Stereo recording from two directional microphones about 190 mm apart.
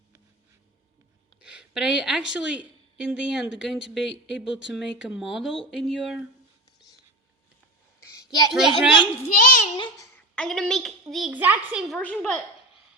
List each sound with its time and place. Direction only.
1.4 s a woman's voice: 5° right (ahead or behind)
8.1 s a sound: 15° left (ahead or behind)
8.5 s a child's voice: centre (ahead or behind)
9.3 s a child's voice: 45° left (ahead or behind)
9.7 s a child's voice: 25° left (ahead or behind)
10.3 s a child's voice: 5° left (ahead or behind)
11.9 s a child's voice: 5° left (ahead or behind)